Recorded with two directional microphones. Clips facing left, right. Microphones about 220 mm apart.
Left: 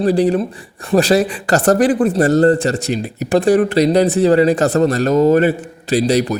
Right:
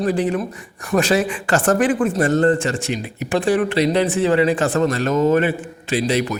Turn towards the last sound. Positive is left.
turn(degrees=40)  # may be behind; listen again after turning